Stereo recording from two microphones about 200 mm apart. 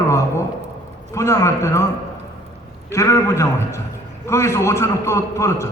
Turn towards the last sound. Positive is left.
turn(degrees=15)  # may be behind; listen again after turning